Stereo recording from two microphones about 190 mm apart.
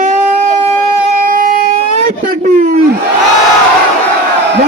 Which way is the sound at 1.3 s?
45° right (ahead or behind).